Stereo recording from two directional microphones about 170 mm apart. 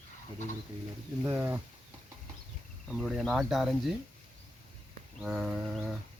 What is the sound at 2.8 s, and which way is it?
Speech, centre (ahead or behind).